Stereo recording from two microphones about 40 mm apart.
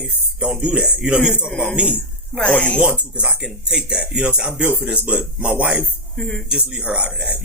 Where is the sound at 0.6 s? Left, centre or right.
Right.